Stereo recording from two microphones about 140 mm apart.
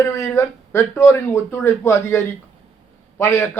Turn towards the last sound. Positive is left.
turn(degrees=15)  # may be behind; listen again after turning